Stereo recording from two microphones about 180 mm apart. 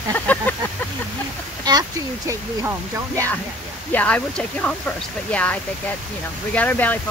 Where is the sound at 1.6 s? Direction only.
20° right (ahead or behind).